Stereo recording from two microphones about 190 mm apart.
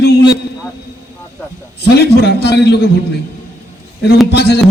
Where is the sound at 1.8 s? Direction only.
60° left (ahead or behind).